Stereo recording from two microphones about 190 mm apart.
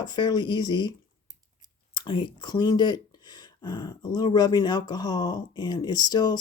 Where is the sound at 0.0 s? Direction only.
20° left (ahead or behind).